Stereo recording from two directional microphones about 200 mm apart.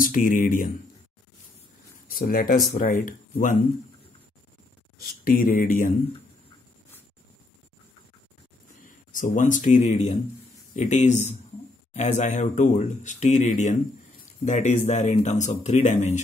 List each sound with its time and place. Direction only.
0.0 s speech: 40° left (ahead or behind)
2.1 s speech: 45° left (ahead or behind)
4.9 s speech: 45° left (ahead or behind)
8.8 s speech: 40° left (ahead or behind)